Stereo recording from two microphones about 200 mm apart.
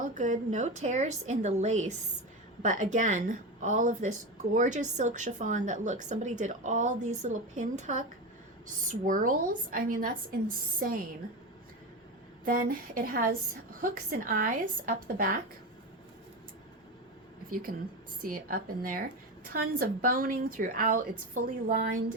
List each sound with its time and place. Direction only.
0.0 s a woman's voice: 40° right (ahead or behind)
12.5 s a woman's voice: 45° right (ahead or behind)
17.5 s a woman's voice: 45° right (ahead or behind)